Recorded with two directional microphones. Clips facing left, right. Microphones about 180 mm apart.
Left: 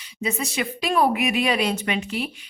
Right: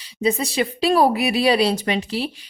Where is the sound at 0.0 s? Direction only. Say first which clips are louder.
Right 6 dB; 35° right (ahead or behind).